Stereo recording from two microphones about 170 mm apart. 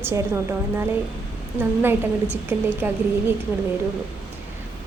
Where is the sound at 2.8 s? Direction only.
10° right (ahead or behind).